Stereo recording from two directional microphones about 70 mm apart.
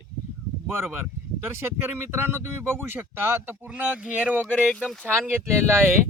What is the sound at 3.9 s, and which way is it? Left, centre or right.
Speech, centre.